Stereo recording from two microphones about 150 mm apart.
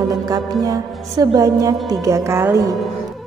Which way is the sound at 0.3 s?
25° right (ahead or behind).